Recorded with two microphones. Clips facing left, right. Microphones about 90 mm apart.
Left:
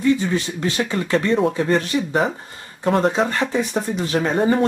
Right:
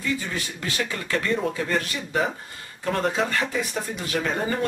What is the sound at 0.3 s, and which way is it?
Speech, 25° left (ahead or behind).